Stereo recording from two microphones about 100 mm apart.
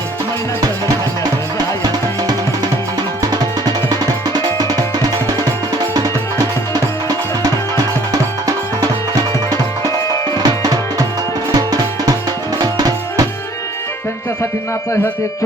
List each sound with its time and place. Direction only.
1.2 s music: 40° right (ahead or behind)
5.9 s music: 40° right (ahead or behind)
8.1 s music: 40° right (ahead or behind)
10.3 s music: 40° right (ahead or behind)